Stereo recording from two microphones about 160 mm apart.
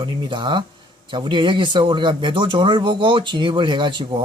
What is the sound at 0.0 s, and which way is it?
Speech, 30° right (ahead or behind).